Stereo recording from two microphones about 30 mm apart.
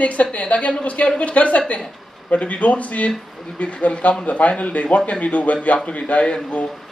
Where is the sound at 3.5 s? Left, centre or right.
Left.